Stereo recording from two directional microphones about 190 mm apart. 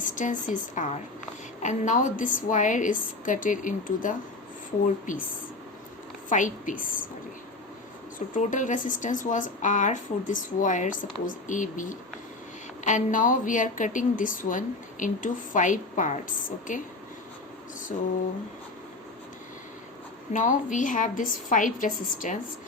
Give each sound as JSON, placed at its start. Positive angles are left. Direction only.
{"t": 0.0, "sound": "a woman's voice", "side_deg": 40}
{"t": 6.2, "sound": "a woman's voice", "side_deg": 45}
{"t": 8.4, "sound": "a woman's voice", "side_deg": 40}
{"t": 20.3, "sound": "a woman's voice", "side_deg": 40}